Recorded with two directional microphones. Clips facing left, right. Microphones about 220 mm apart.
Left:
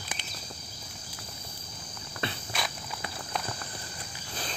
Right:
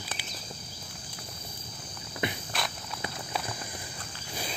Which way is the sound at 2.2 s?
15° right (ahead or behind).